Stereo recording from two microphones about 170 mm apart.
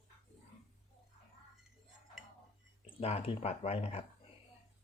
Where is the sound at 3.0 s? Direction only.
35° left (ahead or behind).